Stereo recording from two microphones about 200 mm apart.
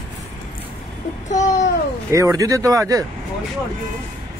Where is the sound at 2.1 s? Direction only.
15° right (ahead or behind).